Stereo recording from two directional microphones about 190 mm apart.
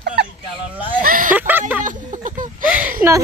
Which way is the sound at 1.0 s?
45° right (ahead or behind).